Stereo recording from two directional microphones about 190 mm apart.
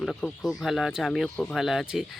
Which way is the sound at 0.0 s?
Centre (ahead or behind).